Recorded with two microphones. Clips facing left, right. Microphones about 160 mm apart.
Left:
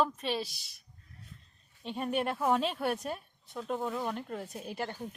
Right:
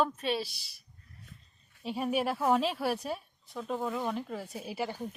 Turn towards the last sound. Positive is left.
turn(degrees=-5)  # may be behind; listen again after turning